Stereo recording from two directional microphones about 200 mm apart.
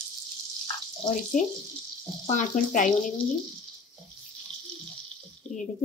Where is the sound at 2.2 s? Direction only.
40° left (ahead or behind).